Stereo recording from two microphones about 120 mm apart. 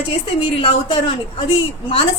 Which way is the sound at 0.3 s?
45° left (ahead or behind).